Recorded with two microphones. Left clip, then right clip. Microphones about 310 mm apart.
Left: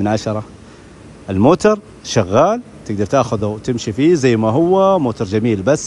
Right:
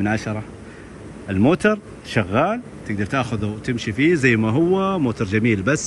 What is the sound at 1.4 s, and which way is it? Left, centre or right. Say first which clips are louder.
Speech: left 6 dB; centre.